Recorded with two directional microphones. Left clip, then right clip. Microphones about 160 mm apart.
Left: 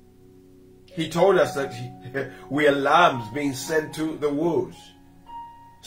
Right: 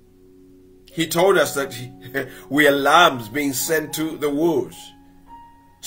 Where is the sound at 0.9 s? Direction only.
15° right (ahead or behind).